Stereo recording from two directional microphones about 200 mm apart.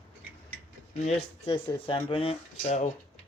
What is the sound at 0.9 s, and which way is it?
Speech, 35° left (ahead or behind).